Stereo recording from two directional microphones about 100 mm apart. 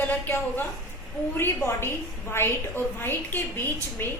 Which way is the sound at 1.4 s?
25° left (ahead or behind).